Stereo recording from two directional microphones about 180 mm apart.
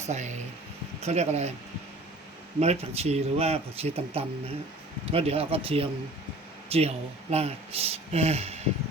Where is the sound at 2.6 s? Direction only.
35° right (ahead or behind).